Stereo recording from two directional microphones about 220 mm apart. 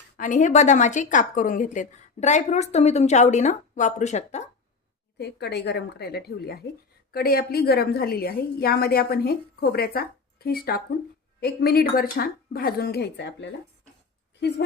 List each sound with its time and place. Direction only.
0.2 s a woman's voice: 35° left (ahead or behind)
5.1 s a woman's voice: 50° left (ahead or behind)